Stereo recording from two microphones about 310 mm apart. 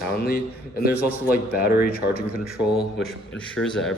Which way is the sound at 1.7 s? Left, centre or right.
Centre.